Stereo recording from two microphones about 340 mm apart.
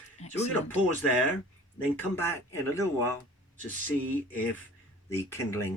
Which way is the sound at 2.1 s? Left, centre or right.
Centre.